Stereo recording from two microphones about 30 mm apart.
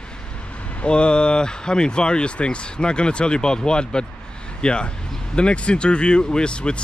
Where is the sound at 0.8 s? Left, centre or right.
Left.